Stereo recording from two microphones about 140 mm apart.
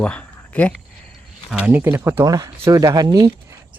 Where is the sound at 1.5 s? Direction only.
10° right (ahead or behind); by 3.3 s 30° right (ahead or behind).